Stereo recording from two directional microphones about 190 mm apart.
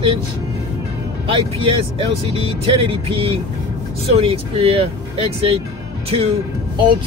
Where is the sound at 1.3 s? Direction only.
30° right (ahead or behind).